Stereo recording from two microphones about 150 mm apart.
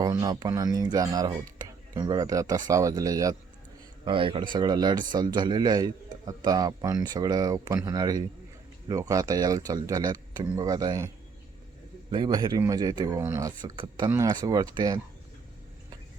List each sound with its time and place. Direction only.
0.0 s speech: 30° right (ahead or behind)
4.0 s speech: 35° right (ahead or behind)
12.1 s speech: 30° right (ahead or behind)